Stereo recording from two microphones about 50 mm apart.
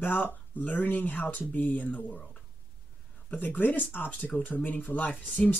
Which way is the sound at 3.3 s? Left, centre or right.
Left.